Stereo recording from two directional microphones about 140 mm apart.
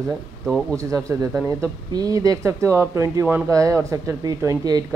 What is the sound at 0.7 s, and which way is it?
Speech, 20° right (ahead or behind).